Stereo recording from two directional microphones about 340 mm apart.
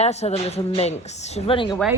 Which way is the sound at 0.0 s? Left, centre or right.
Centre.